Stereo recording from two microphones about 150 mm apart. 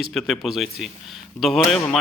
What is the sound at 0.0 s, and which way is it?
A man's voice, centre (ahead or behind).